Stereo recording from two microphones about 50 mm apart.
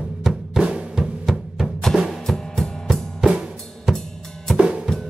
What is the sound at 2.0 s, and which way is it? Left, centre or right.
Music, centre.